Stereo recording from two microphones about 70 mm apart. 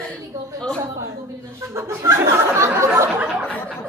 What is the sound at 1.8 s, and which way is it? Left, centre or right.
Speech, right.